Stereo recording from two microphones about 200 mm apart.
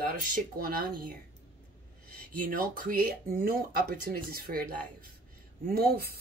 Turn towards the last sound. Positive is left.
turn(degrees=-50)  # may be behind; listen again after turning